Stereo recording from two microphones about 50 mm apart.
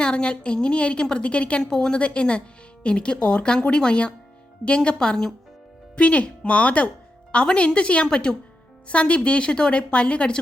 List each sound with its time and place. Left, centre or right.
0.0 s a woman's voice: centre
1.7 s a woman's voice: centre
2.0 s a woman's voice: left
6.0 s a woman's voice: left